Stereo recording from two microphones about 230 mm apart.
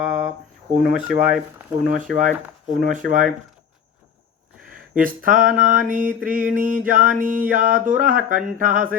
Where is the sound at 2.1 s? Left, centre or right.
Right.